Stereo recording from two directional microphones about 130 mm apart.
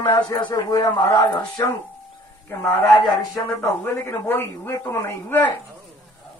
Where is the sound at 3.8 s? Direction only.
15° left (ahead or behind).